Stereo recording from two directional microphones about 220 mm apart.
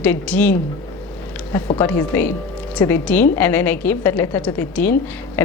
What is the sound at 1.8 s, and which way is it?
A woman's voice, 10° left (ahead or behind).